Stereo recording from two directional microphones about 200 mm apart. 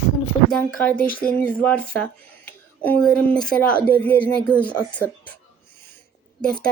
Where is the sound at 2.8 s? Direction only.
5° left (ahead or behind).